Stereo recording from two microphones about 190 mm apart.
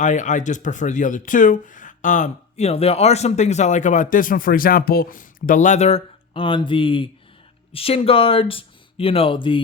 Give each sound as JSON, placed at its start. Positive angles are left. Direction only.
{"t": 0.0, "sound": "speech", "side_deg": 40}